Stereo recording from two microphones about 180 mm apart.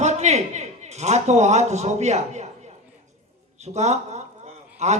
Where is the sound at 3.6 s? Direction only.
40° right (ahead or behind).